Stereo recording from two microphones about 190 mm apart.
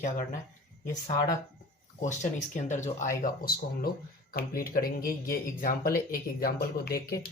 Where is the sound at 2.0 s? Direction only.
40° left (ahead or behind).